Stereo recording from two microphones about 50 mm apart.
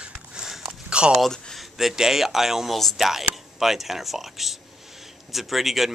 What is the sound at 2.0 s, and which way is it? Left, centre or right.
Speech, centre.